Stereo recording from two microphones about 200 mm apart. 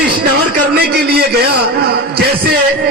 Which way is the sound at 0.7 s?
50° right (ahead or behind).